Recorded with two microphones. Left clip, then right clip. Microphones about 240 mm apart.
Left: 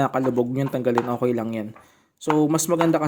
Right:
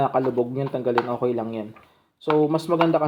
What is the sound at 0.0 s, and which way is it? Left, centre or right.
Speech, left.